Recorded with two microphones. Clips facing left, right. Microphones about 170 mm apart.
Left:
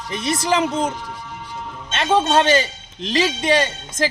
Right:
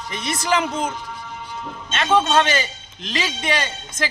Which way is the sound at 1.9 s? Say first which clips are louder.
Left 1 dB; 30° left (ahead or behind).